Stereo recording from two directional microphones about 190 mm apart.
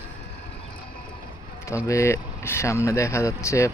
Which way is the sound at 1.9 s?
15° left (ahead or behind).